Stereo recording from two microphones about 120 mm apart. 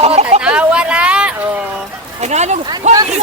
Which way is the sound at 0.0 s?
60° right (ahead or behind).